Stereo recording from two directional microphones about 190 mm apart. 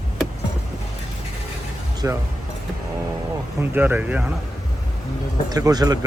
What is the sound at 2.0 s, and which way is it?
Speech, 15° right (ahead or behind).